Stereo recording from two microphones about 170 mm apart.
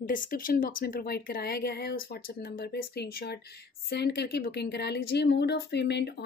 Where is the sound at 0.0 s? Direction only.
55° left (ahead or behind).